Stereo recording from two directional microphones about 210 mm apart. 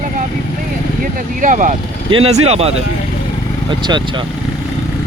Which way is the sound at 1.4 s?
40° right (ahead or behind).